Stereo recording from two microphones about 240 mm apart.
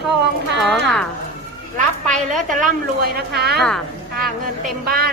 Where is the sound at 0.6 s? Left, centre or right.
Centre.